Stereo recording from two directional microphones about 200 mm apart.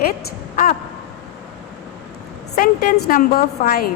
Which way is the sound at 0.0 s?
45° left (ahead or behind).